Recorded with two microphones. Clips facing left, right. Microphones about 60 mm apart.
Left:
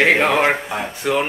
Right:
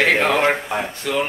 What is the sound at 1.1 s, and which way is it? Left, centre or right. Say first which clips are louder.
Speech: left 4 dB; left.